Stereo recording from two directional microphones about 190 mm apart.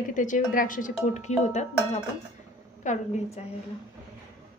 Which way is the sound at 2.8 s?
40° left (ahead or behind).